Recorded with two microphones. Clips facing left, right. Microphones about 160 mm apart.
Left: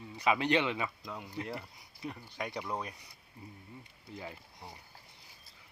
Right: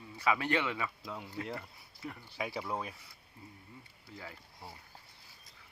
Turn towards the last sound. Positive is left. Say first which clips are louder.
# left 1 dB
turn(degrees=15)  # may be behind; listen again after turning